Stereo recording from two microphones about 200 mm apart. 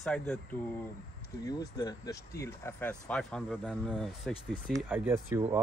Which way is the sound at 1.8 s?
20° left (ahead or behind).